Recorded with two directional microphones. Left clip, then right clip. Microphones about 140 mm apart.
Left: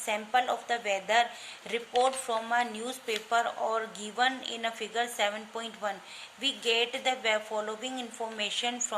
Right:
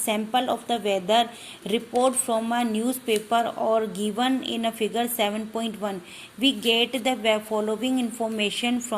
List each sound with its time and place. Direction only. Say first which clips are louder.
0.0 s a woman's voice: right 4 dB; 30° right (ahead or behind)